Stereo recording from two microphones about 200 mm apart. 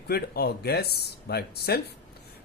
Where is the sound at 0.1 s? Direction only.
50° left (ahead or behind).